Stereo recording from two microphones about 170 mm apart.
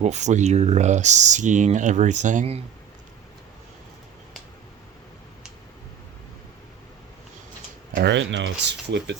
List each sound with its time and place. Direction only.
0.0 s speech: 40° right (ahead or behind)
7.9 s speech: 85° right